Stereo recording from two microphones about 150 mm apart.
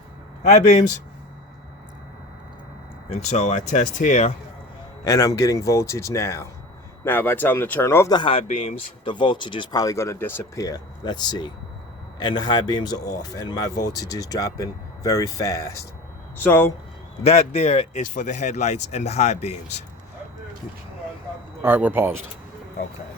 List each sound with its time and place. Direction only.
0.4 s speech: 50° left (ahead or behind)
3.1 s speech: 45° left (ahead or behind)
5.0 s speech: 20° left (ahead or behind)
8.2 s speech: 40° left (ahead or behind); by 16.7 s 15° left (ahead or behind)
17.2 s speech: 45° left (ahead or behind)
21.6 s speech: 10° right (ahead or behind)